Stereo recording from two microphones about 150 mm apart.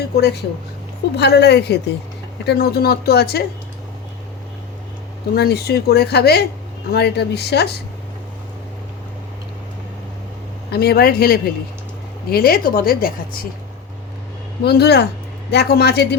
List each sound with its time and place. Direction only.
0.2 s speech: 90° left
5.3 s speech: 90° left
10.7 s speech: 90° left
12.3 s speech: 80° left
14.6 s speech: 90° left